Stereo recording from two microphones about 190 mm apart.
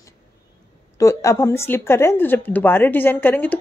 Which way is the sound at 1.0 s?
15° left (ahead or behind).